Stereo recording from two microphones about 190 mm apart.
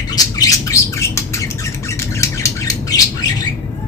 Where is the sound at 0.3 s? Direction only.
15° left (ahead or behind).